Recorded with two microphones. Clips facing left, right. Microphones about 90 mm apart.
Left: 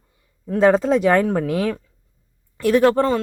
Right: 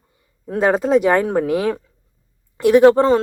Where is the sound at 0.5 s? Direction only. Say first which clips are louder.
Even; 5° right (ahead or behind).